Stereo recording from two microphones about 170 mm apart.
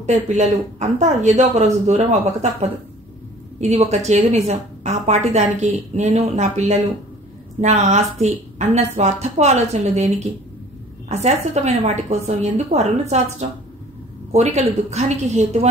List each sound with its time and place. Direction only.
0.0 s a woman's voice: 45° right (ahead or behind)
14.3 s a woman's voice: 40° right (ahead or behind)